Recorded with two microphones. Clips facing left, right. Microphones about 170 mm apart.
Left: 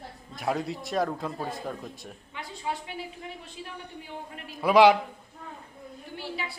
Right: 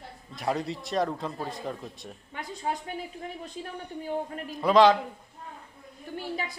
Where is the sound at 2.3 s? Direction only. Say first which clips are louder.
Right 2 dB; 45° right (ahead or behind).